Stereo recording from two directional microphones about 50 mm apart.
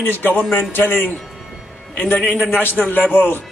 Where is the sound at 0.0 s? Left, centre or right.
Left.